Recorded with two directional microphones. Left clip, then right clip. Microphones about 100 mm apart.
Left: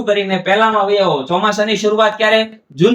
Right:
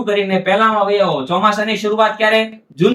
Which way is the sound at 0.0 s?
20° left (ahead or behind).